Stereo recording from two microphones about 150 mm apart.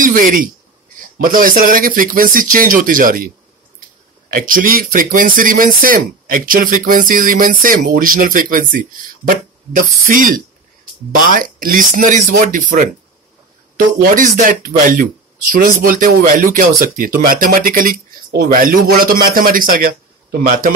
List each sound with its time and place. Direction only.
0.0 s speech: 65° right (ahead or behind)
4.3 s a man's voice: 65° right (ahead or behind)